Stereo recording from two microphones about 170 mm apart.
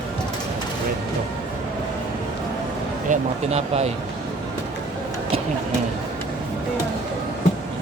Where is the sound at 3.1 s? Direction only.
40° right (ahead or behind).